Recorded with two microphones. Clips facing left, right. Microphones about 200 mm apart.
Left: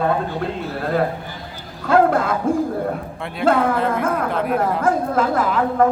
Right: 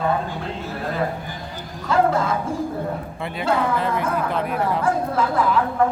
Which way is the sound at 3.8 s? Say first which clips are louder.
Left 3 dB; centre (ahead or behind).